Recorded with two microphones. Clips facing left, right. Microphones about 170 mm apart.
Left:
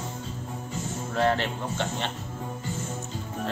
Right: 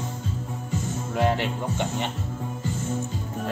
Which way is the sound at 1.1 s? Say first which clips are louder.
Right 1 dB; 15° right (ahead or behind).